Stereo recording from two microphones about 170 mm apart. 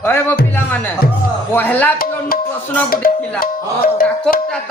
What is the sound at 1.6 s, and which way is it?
Speech, 10° left (ahead or behind).